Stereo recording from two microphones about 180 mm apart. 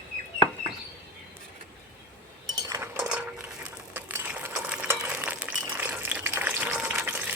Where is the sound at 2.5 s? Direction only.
20° right (ahead or behind).